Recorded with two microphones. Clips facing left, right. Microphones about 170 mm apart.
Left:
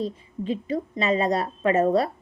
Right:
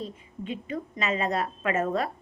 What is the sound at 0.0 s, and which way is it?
A woman's voice, 35° left (ahead or behind).